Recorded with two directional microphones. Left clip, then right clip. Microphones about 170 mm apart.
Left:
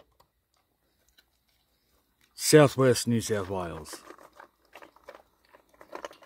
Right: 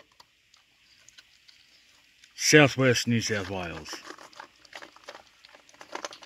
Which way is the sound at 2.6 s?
25° left (ahead or behind).